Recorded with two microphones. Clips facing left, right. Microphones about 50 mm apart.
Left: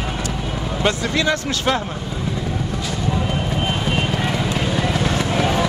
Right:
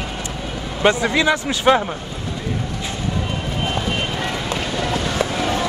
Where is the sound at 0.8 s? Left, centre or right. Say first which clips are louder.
Right 4 dB; right.